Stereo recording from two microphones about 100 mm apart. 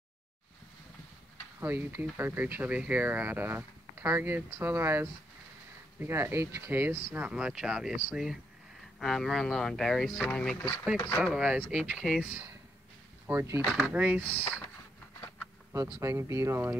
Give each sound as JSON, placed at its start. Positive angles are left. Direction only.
{"t": 1.6, "sound": "speech", "side_deg": -20}
{"t": 7.2, "sound": "speech", "side_deg": -10}
{"t": 11.3, "sound": "speech", "side_deg": -5}
{"t": 13.3, "sound": "speech", "side_deg": -25}
{"t": 13.8, "sound": "speech", "side_deg": -15}
{"t": 14.2, "sound": "speech", "side_deg": 15}
{"t": 15.7, "sound": "speech", "side_deg": -30}